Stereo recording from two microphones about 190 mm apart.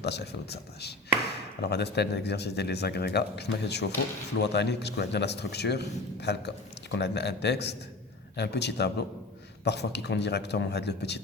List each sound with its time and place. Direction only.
0.0 s speech: 60° left (ahead or behind)